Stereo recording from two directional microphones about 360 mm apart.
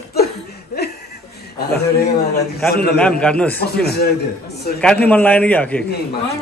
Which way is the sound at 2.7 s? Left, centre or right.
Left.